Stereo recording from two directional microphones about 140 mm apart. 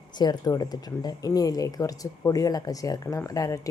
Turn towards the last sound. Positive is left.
turn(degrees=25)  # may be behind; listen again after turning